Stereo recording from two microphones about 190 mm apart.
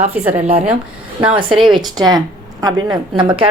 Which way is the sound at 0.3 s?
35° right (ahead or behind).